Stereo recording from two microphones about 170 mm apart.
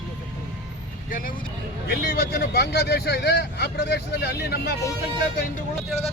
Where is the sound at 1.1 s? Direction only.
55° left (ahead or behind).